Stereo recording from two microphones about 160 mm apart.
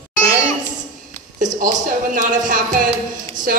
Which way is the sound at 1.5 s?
25° right (ahead or behind).